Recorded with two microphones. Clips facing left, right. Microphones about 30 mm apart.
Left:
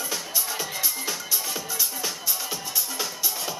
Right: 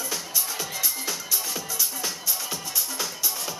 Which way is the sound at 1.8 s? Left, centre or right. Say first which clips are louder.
Even; centre.